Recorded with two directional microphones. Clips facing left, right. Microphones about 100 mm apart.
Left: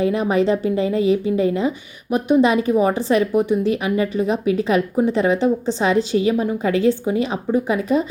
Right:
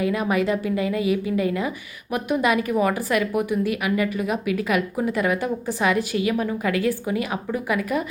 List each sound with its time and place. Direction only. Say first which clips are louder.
0.0 s a woman's voice: left 4 dB; 25° left (ahead or behind)